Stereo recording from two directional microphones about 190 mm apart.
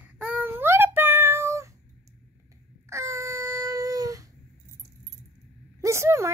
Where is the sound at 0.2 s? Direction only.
10° right (ahead or behind).